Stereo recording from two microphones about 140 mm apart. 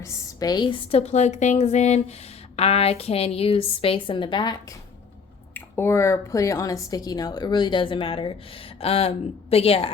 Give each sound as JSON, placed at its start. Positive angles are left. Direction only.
{"t": 0.0, "sound": "a woman's voice", "side_deg": 25}
{"t": 5.5, "sound": "a woman's voice", "side_deg": 15}